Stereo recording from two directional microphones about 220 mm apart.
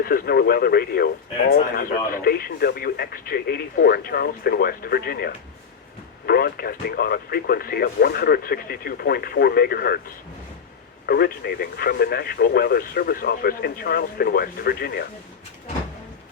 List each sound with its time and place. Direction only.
0.0 s speech: 45° left (ahead or behind)
11.0 s speech: 45° left (ahead or behind)